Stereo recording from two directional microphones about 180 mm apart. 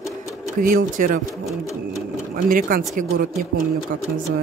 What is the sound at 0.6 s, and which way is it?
Speech, 50° right (ahead or behind).